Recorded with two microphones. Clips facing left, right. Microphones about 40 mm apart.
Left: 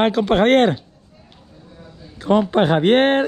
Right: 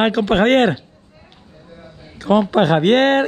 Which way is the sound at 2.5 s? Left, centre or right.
Right.